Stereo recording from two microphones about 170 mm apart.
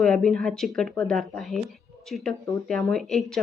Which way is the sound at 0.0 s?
5° left (ahead or behind).